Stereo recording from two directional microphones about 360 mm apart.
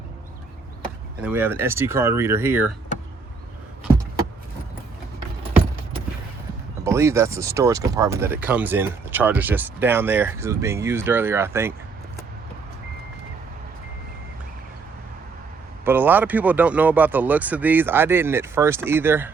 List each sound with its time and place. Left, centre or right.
1.2 s speech: centre
6.8 s speech: centre
15.8 s speech: centre